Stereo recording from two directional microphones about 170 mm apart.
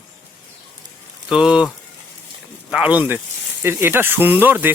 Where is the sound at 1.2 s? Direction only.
5° right (ahead or behind).